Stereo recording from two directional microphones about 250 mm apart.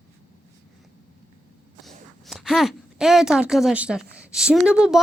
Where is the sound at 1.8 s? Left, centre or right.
Centre.